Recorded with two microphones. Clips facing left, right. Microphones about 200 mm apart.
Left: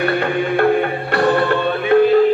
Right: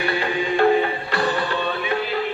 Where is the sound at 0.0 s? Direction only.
55° left (ahead or behind).